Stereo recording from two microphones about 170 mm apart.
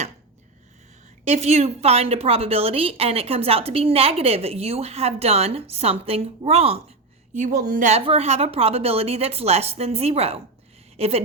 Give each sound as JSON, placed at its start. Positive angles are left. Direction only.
{"t": 1.2, "sound": "a woman's voice", "side_deg": -40}
{"t": 7.3, "sound": "a woman's voice", "side_deg": -50}